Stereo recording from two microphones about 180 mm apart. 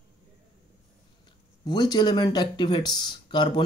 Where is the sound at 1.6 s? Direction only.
20° left (ahead or behind).